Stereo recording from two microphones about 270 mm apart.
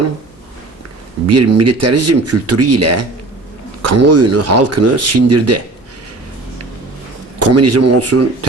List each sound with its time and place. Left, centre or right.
1.3 s speech: right
7.3 s speech: right